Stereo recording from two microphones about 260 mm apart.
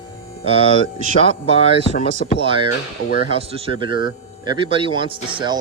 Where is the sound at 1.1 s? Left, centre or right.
Left.